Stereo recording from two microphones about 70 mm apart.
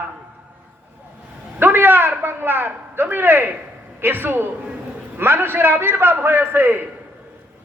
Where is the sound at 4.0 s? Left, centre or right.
Right.